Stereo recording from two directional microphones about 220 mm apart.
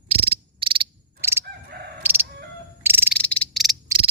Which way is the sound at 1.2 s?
10° right (ahead or behind).